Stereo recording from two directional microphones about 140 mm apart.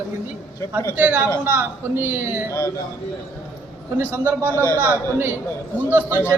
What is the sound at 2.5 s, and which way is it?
Speech, 20° left (ahead or behind).